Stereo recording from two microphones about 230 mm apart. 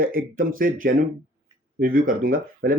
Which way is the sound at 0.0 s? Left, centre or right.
Right.